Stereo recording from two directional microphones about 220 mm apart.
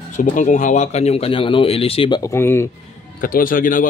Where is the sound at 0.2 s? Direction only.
35° left (ahead or behind); by 2.7 s 10° left (ahead or behind).